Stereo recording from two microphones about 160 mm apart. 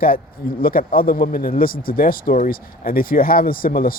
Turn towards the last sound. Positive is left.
turn(degrees=65)  # may be behind; listen again after turning